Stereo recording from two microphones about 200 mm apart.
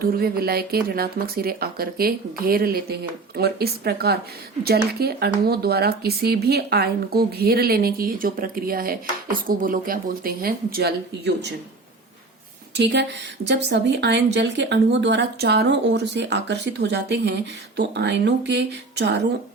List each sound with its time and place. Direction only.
0.0 s speech: 50° right (ahead or behind)
12.7 s speech: 60° right (ahead or behind)